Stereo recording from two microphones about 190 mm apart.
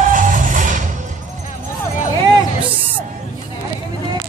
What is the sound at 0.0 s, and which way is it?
Music, 45° right (ahead or behind).